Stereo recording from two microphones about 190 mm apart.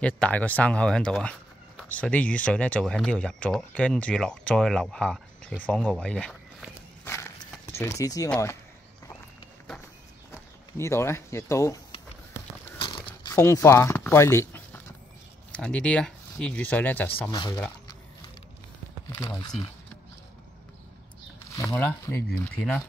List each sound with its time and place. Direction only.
0.0 s speech: 5° left (ahead or behind)
5.7 s walk: 5° left (ahead or behind)
7.7 s speech: 15° left (ahead or behind)
10.8 s speech: 15° left (ahead or behind)
12.7 s a sound: 25° left (ahead or behind)
15.5 s speech: 5° left (ahead or behind)
17.2 s speech: 20° left (ahead or behind)
19.0 s speech: 15° left (ahead or behind)
21.5 s a sound: 15° left (ahead or behind)
22.6 s speech: 5° left (ahead or behind)